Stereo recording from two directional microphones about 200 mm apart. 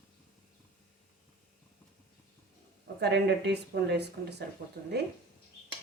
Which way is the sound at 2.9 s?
55° right (ahead or behind).